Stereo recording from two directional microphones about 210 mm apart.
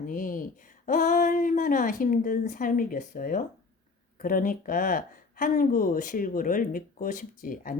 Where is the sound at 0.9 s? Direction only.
35° left (ahead or behind).